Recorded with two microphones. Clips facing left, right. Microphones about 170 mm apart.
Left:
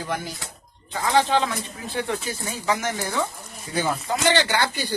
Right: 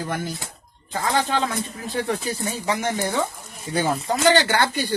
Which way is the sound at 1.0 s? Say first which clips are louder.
Left 2 dB; 50° right (ahead or behind).